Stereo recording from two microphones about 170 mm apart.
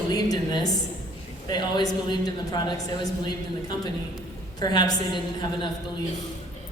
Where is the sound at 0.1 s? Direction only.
20° left (ahead or behind).